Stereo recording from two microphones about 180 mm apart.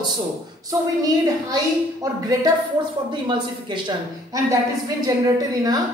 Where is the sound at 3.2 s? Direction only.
25° right (ahead or behind).